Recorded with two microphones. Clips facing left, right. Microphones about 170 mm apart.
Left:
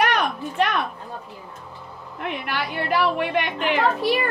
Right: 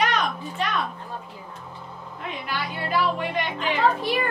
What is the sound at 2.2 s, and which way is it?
A woman's voice, 65° left (ahead or behind).